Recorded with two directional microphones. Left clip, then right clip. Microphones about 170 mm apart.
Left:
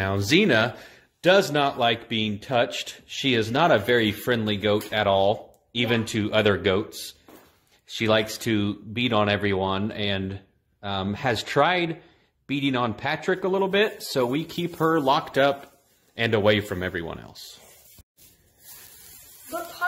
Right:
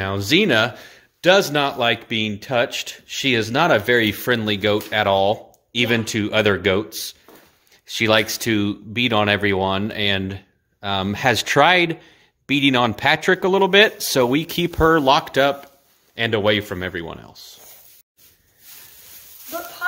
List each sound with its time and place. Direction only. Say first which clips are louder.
0.0 s speech: right 3 dB; 10° right (ahead or behind); by 15.4 s 30° right (ahead or behind)
16.2 s speech: right 2 dB; 10° right (ahead or behind)